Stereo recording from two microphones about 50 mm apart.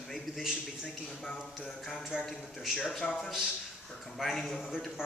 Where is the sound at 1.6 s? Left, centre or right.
Centre.